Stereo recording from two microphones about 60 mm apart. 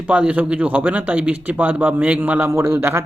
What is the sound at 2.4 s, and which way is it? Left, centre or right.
Speech, right.